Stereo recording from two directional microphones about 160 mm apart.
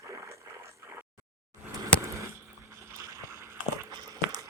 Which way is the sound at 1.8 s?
20° right (ahead or behind).